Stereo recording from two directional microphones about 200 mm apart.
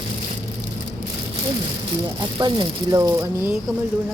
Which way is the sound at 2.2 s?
20° right (ahead or behind).